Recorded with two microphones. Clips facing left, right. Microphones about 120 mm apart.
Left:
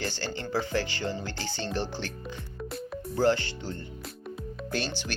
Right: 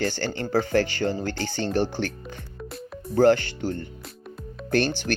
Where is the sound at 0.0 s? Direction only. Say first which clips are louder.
Right 7 dB; 55° right (ahead or behind).